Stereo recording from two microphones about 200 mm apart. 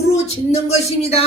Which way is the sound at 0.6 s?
30° left (ahead or behind).